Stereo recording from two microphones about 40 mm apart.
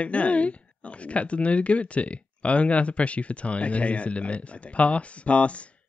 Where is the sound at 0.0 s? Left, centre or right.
Left.